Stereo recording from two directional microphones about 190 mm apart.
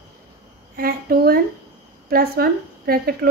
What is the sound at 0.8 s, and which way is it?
A woman's voice, 55° right (ahead or behind).